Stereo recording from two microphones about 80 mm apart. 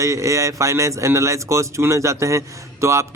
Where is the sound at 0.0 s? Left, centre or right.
Right.